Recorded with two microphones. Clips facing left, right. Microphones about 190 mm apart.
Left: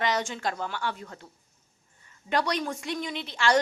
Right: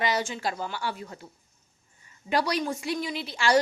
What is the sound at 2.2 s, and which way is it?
A woman's voice, 10° right (ahead or behind).